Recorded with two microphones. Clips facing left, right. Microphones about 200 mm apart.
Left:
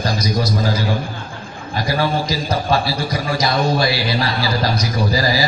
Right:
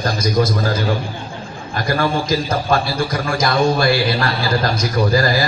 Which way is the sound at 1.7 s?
50° right (ahead or behind).